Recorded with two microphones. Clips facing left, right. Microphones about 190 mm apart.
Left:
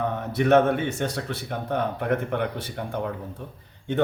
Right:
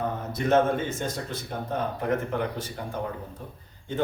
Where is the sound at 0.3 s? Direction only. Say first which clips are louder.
Left 4 dB; 65° left (ahead or behind).